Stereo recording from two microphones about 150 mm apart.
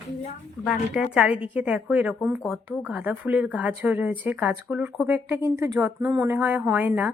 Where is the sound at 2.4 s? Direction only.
Centre (ahead or behind).